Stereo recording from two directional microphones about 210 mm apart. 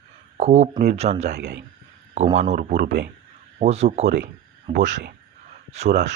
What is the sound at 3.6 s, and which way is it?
Speech, 30° right (ahead or behind).